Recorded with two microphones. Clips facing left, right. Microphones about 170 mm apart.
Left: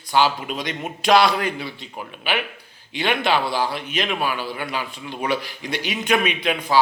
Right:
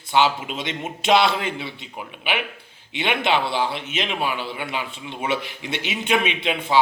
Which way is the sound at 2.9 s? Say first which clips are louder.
Left 1 dB; 20° right (ahead or behind).